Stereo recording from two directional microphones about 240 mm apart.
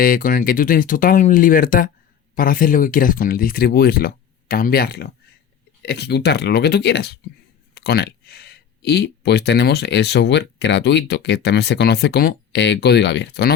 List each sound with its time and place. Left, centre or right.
0.0 s speech: left